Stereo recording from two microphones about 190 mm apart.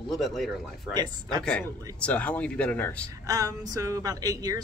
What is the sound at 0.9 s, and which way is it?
Speech, 20° right (ahead or behind).